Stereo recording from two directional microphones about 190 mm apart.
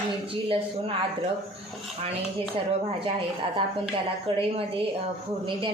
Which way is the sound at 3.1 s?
30° right (ahead or behind).